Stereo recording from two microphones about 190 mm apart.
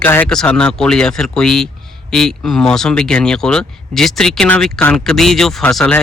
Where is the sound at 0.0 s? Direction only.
10° left (ahead or behind).